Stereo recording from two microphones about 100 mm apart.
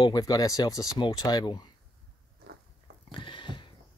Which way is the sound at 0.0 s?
40° left (ahead or behind).